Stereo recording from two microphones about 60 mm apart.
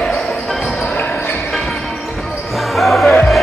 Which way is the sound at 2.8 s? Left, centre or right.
Centre.